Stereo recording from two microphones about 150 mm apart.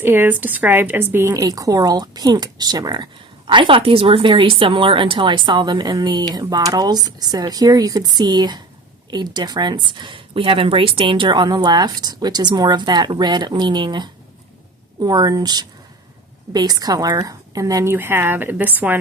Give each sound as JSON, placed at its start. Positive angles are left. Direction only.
{"t": 0.0, "sound": "a woman's voice", "side_deg": -15}